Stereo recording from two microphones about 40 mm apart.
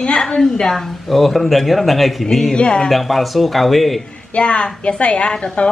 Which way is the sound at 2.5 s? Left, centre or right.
Left.